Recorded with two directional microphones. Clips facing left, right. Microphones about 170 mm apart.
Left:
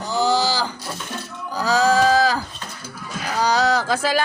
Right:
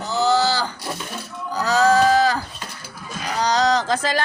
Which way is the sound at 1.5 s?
10° left (ahead or behind).